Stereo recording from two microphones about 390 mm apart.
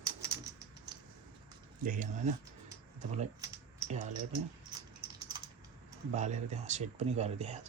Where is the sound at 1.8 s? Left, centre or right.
Centre.